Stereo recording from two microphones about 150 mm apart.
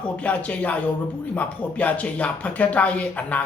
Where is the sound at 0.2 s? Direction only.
10° left (ahead or behind).